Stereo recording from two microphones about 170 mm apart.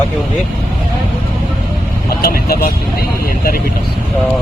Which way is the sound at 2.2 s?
60° left (ahead or behind).